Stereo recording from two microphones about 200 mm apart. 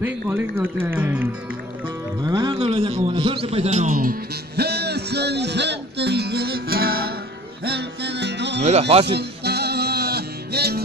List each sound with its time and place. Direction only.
0.0 s speech: 10° right (ahead or behind)
2.2 s a man's voice: 20° right (ahead or behind); by 7.2 s 50° right (ahead or behind)
7.6 s music: 55° right (ahead or behind)
8.6 s speech: 30° right (ahead or behind)
9.0 s music: 55° right (ahead or behind)